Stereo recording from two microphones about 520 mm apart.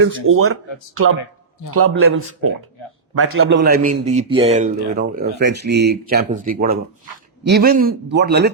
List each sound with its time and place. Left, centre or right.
0.0 s a man's voice: right
1.7 s a man's voice: right